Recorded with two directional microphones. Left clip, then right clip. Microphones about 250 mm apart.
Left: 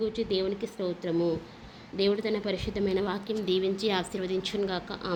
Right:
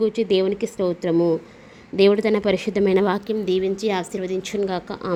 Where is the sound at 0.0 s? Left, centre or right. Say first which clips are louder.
Right 10 dB; right.